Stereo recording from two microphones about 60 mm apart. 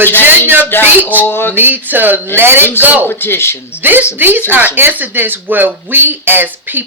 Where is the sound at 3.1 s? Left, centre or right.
Left.